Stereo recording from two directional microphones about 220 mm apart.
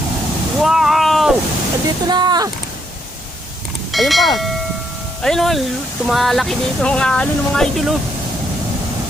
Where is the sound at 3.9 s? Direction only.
Centre (ahead or behind).